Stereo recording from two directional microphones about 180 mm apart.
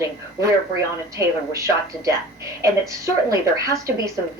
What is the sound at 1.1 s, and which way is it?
A woman's voice, 15° right (ahead or behind).